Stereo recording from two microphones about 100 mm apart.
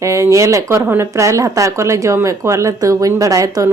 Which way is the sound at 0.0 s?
30° right (ahead or behind).